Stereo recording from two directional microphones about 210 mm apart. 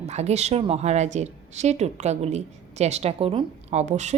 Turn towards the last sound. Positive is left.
turn(degrees=-35)  # may be behind; listen again after turning